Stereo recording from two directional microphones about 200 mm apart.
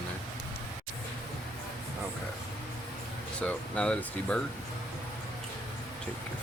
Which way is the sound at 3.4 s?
5° left (ahead or behind).